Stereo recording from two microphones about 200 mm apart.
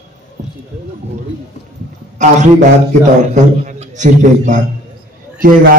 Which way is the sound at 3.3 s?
35° right (ahead or behind).